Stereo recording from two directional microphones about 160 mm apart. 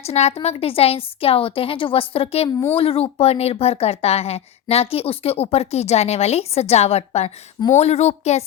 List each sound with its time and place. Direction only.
0.0 s a woman's voice: 40° left (ahead or behind)